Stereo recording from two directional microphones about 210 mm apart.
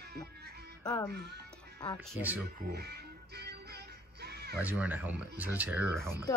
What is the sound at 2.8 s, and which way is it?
Music, 50° right (ahead or behind).